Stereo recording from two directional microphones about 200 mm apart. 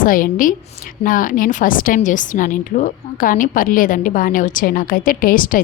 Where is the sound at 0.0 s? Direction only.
45° left (ahead or behind).